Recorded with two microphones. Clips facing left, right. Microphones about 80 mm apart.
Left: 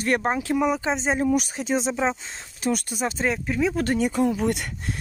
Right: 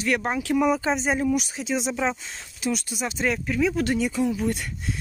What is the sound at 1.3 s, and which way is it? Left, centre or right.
Speech, left.